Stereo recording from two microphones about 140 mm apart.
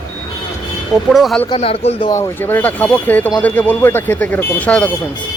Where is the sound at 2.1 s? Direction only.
20° left (ahead or behind).